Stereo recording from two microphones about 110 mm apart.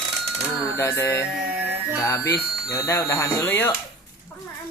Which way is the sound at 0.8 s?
25° left (ahead or behind).